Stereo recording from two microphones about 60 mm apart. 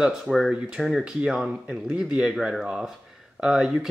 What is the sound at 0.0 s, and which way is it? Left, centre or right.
Speech, centre.